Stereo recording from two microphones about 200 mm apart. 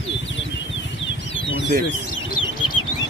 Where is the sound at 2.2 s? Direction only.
20° left (ahead or behind).